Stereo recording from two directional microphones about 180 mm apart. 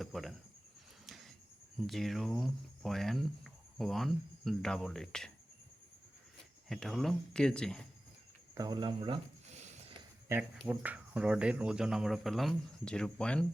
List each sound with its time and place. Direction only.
0.0 s speech: centre (ahead or behind)
1.0 s a sound: centre (ahead or behind)
1.9 s speech: centre (ahead or behind)
6.7 s speech: centre (ahead or behind)
8.5 s speech: 20° right (ahead or behind)
9.5 s a sound: 40° right (ahead or behind)
10.6 s speech: 10° right (ahead or behind)